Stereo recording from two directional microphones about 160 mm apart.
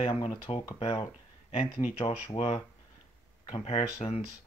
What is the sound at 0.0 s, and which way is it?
Speech, 35° left (ahead or behind).